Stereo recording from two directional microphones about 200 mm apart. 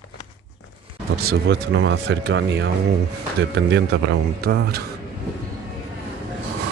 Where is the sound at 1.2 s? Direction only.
55° right (ahead or behind).